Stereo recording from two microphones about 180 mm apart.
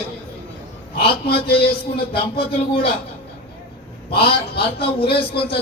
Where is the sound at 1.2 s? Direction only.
60° left (ahead or behind).